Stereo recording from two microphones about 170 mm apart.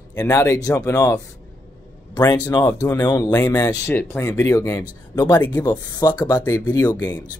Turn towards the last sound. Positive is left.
turn(degrees=15)  # may be behind; listen again after turning